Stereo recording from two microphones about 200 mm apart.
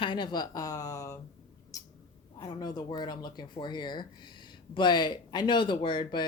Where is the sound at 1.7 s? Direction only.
15° left (ahead or behind).